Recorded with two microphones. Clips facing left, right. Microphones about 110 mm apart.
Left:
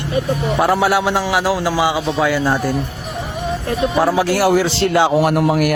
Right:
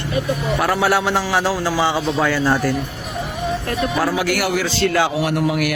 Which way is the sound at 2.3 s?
15° left (ahead or behind).